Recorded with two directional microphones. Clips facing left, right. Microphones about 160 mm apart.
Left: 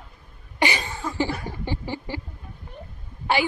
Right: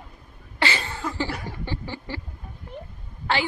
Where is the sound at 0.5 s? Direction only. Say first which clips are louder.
Left 2 dB; 15° left (ahead or behind).